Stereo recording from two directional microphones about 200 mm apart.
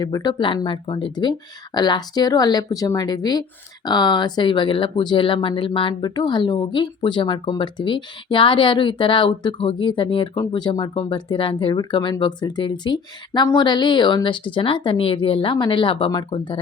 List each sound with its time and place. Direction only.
0.0 s speech: 20° left (ahead or behind)